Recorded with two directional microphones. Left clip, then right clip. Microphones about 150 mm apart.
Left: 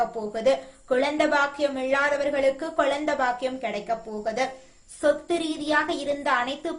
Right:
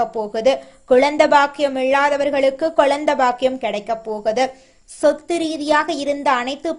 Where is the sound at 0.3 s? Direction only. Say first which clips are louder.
Right 5 dB; 45° right (ahead or behind).